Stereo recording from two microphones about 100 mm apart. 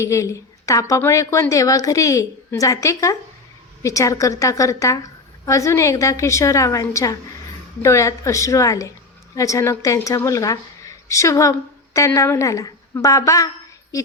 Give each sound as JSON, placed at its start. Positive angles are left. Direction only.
{"t": 0.0, "sound": "a woman's voice", "side_deg": 30}